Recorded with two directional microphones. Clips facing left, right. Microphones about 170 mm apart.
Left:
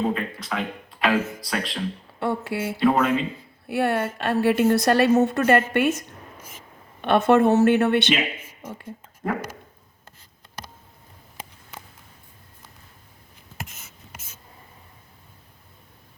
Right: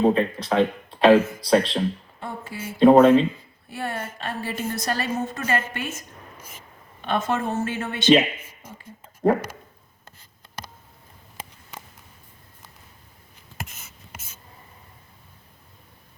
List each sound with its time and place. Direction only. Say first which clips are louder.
0.0 s speech: right 6 dB; 30° right (ahead or behind)
2.1 s speech: left 9 dB; 70° left (ahead or behind)
2.8 s speech: right 8 dB; 30° right (ahead or behind)
3.7 s a woman's voice: left 8 dB; 65° left (ahead or behind)